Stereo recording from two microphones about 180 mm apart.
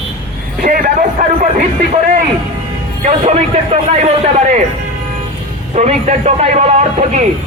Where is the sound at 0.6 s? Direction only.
50° right (ahead or behind).